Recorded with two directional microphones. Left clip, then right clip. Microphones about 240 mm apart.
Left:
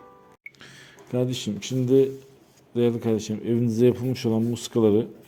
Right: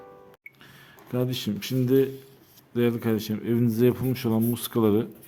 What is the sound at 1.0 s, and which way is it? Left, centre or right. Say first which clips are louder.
Speech: left 2 dB; centre.